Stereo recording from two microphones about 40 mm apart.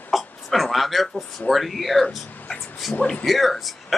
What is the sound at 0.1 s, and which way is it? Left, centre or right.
A man's voice, centre.